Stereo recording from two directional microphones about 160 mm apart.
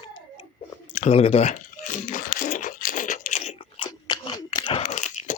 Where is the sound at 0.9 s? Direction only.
45° left (ahead or behind).